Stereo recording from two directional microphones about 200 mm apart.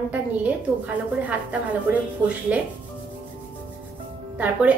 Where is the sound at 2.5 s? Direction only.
5° right (ahead or behind).